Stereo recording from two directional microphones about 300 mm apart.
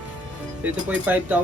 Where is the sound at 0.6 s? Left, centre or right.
Centre.